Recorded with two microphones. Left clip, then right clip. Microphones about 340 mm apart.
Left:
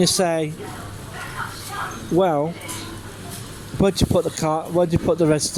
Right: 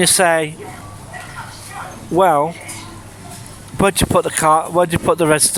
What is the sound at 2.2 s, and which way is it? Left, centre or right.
Speech, right.